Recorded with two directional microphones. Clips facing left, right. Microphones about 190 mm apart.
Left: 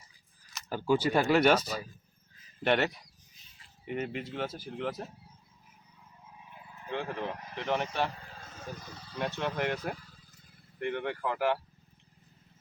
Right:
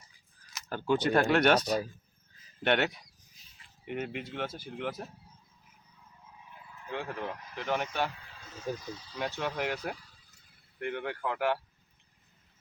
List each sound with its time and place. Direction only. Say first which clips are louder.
0.9 s speech: even; 5° left (ahead or behind)
6.9 s speech: left 2 dB; centre (ahead or behind)
8.1 s speech: left 1 dB; 45° left (ahead or behind)
9.1 s speech: left 1 dB; centre (ahead or behind)